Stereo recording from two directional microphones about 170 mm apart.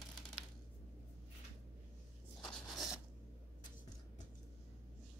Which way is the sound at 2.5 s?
Centre (ahead or behind).